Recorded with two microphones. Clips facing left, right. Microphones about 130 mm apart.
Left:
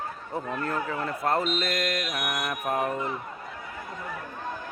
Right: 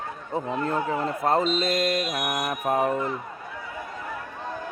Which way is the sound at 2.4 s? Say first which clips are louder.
Right 5 dB; 15° right (ahead or behind).